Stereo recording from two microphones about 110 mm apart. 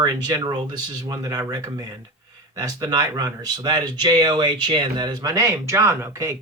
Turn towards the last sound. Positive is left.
turn(degrees=-25)  # may be behind; listen again after turning